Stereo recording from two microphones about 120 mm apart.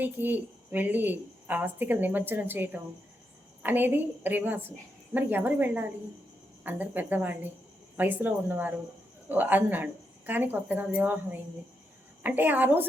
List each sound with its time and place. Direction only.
0.0 s a woman's voice: 15° right (ahead or behind)